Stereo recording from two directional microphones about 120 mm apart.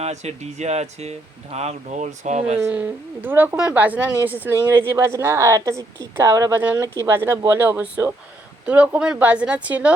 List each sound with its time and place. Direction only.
0.0 s speech: 65° right (ahead or behind)
2.6 s a woman's voice: 15° right (ahead or behind)